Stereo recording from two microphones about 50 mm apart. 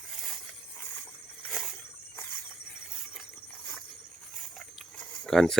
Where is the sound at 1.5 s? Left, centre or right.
Centre.